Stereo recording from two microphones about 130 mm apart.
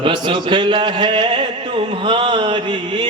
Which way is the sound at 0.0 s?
40° right (ahead or behind).